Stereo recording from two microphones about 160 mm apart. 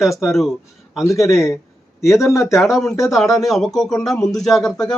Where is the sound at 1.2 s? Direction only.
20° left (ahead or behind).